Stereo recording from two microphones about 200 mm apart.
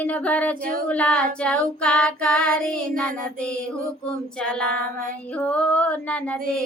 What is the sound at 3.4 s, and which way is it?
Female singing, 5° left (ahead or behind).